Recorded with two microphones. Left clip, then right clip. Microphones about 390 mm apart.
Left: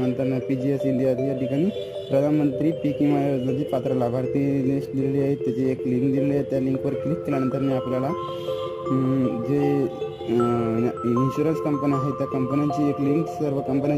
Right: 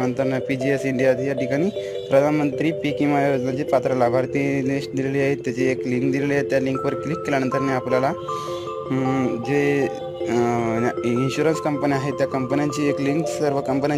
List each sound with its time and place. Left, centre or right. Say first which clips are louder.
0.0 s speech: right 3 dB; right
10.3 s speech: right 1 dB; right